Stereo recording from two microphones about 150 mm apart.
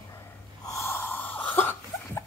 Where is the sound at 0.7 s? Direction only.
20° left (ahead or behind).